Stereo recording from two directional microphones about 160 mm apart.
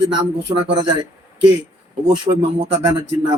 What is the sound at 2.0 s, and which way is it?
A man's voice, 35° right (ahead or behind).